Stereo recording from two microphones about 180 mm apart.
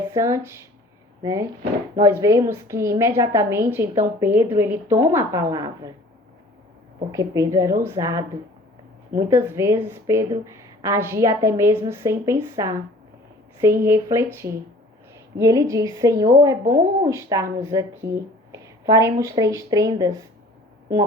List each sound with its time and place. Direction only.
0.2 s a woman's voice: 15° right (ahead or behind)
7.1 s a woman's voice: 20° right (ahead or behind)
13.8 s a woman's voice: 15° right (ahead or behind)